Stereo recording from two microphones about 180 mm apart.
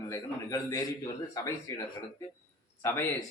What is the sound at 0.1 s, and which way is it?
A man's voice, 20° left (ahead or behind).